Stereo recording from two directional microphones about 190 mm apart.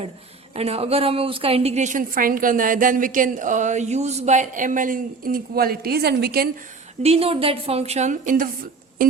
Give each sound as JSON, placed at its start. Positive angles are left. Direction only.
{"t": 0.5, "sound": "a woman's voice", "side_deg": -35}
{"t": 7.0, "sound": "a woman's voice", "side_deg": -30}